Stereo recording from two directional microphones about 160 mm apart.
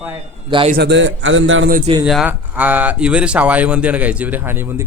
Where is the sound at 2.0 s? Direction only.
5° right (ahead or behind).